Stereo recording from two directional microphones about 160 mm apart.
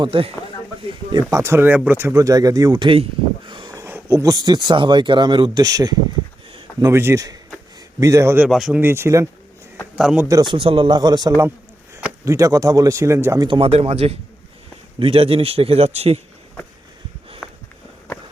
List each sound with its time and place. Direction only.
0.0 s a man's voice: 35° right (ahead or behind)
1.1 s speech: 20° right (ahead or behind)
8.4 s speech: centre (ahead or behind)
8.8 s a man's voice: 15° right (ahead or behind)
10.2 s speech: 25° right (ahead or behind)
13.6 s a man's voice: 40° right (ahead or behind)
17.4 s a sound: centre (ahead or behind)